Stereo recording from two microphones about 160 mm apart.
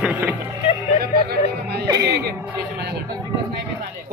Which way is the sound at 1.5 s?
90° right.